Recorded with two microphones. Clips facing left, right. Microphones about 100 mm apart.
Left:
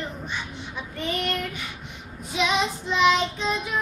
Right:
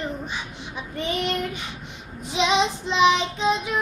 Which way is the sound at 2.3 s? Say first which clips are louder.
Right 3 dB; 25° right (ahead or behind).